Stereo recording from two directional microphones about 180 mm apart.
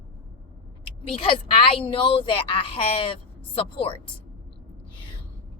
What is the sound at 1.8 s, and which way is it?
A woman's voice, 30° left (ahead or behind).